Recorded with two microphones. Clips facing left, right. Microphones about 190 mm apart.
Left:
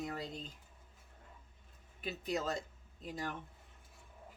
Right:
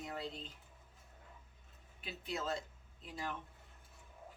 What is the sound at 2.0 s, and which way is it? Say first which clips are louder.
Speech: left 5 dB; 45° left (ahead or behind).